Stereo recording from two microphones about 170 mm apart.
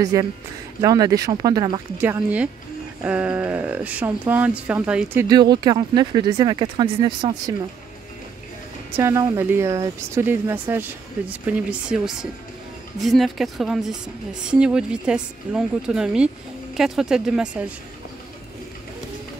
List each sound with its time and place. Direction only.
0.0 s speech: 20° right (ahead or behind)
2.0 s speech: 10° right (ahead or behind)
5.3 s speech: 25° right (ahead or behind)
8.9 s speech: 20° right (ahead or behind)